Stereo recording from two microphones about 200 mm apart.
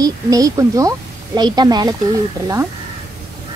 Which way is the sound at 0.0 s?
15° right (ahead or behind).